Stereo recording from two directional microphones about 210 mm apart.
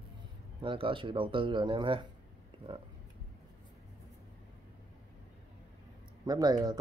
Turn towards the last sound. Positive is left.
turn(degrees=-20)  # may be behind; listen again after turning